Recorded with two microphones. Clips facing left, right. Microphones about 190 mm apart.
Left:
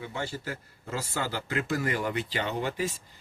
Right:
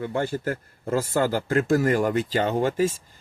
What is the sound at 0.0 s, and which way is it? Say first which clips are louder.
A man's voice: right 9 dB; 55° right (ahead or behind).